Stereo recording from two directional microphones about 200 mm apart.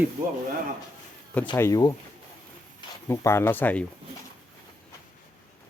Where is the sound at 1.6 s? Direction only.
15° left (ahead or behind).